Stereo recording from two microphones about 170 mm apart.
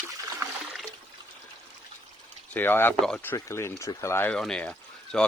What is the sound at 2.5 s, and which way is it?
Speech, 10° left (ahead or behind).